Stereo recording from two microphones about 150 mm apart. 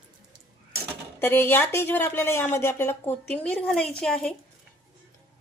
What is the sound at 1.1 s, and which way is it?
Speech, 15° left (ahead or behind).